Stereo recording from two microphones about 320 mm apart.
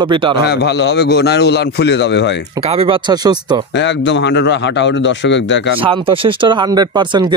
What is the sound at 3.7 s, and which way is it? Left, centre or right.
A man's voice, left.